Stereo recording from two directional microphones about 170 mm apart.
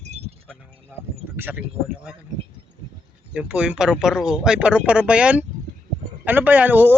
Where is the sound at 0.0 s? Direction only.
40° right (ahead or behind).